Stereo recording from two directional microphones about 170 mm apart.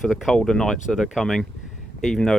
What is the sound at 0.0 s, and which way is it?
Speech, centre (ahead or behind).